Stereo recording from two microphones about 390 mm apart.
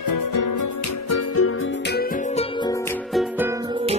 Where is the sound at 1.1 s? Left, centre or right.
Left.